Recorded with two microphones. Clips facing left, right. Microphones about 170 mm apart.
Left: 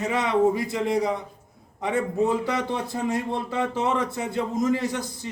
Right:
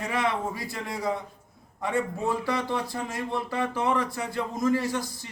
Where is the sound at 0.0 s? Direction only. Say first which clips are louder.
Left 7 dB; 20° left (ahead or behind).